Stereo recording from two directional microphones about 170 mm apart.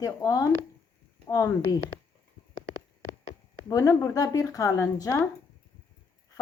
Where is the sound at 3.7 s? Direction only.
20° left (ahead or behind).